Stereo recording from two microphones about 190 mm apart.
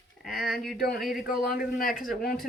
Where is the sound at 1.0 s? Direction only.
Centre (ahead or behind).